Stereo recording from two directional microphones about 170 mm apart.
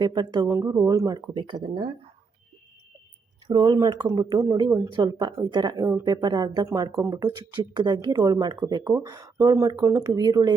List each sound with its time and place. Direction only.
0.0 s speech: 25° right (ahead or behind)
3.4 s speech: 25° right (ahead or behind)